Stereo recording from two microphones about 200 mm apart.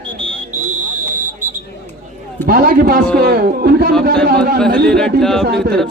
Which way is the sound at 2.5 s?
50° right (ahead or behind).